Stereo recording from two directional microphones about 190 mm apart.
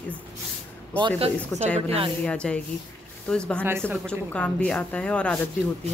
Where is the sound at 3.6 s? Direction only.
10° right (ahead or behind).